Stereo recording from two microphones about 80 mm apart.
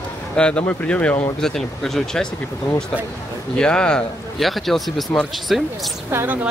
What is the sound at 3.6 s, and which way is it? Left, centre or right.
Speech, centre.